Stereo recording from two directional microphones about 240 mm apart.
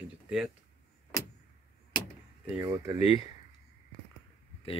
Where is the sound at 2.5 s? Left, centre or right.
Centre.